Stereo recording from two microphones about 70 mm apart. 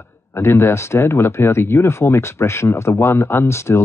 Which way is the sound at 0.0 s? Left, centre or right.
Left.